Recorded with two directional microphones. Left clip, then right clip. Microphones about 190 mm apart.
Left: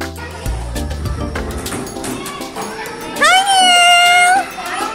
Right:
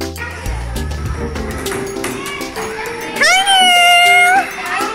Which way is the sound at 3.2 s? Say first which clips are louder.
Even; 5° left (ahead or behind).